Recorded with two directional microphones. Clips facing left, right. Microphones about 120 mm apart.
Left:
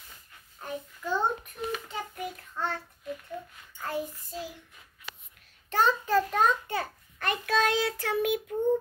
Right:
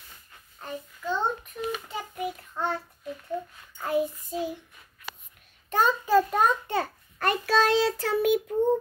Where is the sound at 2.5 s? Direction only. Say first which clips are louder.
Right 2 dB; 25° right (ahead or behind).